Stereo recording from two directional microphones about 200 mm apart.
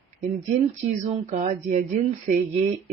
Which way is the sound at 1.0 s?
35° right (ahead or behind).